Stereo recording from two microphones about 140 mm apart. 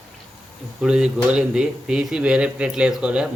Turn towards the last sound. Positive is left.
turn(degrees=-5)  # may be behind; listen again after turning